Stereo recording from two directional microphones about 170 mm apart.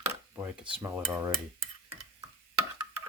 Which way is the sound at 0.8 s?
15° right (ahead or behind).